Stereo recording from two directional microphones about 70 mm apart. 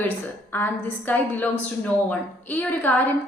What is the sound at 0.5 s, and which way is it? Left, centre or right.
A woman's voice, left.